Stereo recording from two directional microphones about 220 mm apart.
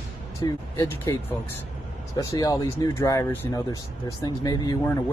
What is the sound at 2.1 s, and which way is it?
Speech, 15° left (ahead or behind).